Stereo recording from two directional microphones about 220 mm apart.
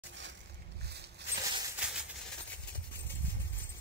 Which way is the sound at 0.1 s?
55° right (ahead or behind).